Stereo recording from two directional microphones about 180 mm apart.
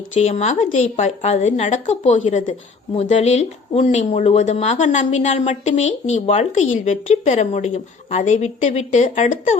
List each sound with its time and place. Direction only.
0.1 s a woman's voice: 40° left (ahead or behind)